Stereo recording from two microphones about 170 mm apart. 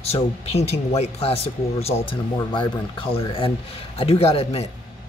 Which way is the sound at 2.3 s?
25° left (ahead or behind).